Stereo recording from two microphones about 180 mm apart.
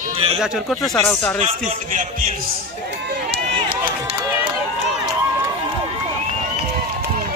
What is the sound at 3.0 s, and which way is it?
Run, 60° right (ahead or behind).